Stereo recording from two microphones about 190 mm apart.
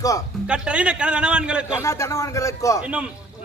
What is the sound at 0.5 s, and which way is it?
A man's voice, 5° right (ahead or behind).